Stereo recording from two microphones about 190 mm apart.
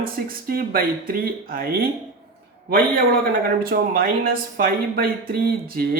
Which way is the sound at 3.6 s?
50° right (ahead or behind).